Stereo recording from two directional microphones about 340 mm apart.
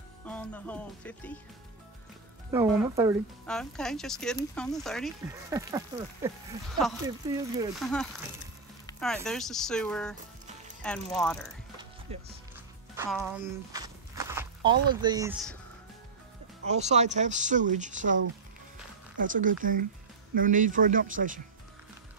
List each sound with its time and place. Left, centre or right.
0.2 s music: centre
2.5 s speech: centre
5.3 s speech: centre
7.7 s speech: centre
12.1 s speech: centre
12.9 s speech: centre
16.6 s speech: centre
19.1 s speech: right